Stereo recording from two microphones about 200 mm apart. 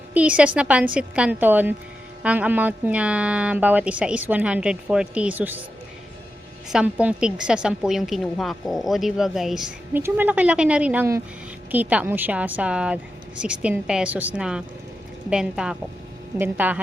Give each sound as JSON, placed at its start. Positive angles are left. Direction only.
{"t": 0.1, "sound": "a woman's voice", "side_deg": -5}
{"t": 6.7, "sound": "a woman's voice", "side_deg": -5}